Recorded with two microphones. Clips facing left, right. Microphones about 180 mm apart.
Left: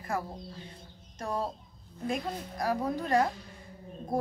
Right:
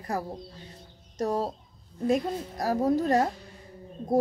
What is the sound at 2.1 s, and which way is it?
A woman's voice, 40° right (ahead or behind).